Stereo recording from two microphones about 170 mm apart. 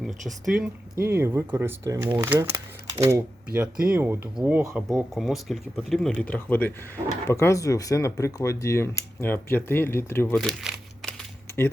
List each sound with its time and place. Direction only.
0.0 s speech: centre (ahead or behind)
1.0 s speech: 15° right (ahead or behind); by 10.3 s 15° left (ahead or behind)
10.3 s crumpling: centre (ahead or behind)